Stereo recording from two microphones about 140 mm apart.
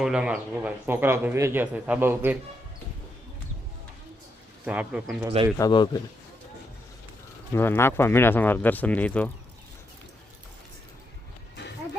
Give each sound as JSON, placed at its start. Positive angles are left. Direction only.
{"t": 0.0, "sound": "a man's voice", "side_deg": -5}
{"t": 4.6, "sound": "a man's voice", "side_deg": -10}
{"t": 5.5, "sound": "speech", "side_deg": 30}
{"t": 7.5, "sound": "speech", "side_deg": 15}